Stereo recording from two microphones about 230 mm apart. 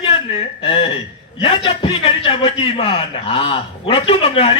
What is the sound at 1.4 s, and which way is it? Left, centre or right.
A man's voice, left.